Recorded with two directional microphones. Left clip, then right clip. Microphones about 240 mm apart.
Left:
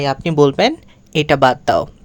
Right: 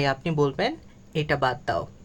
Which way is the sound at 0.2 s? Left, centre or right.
Left.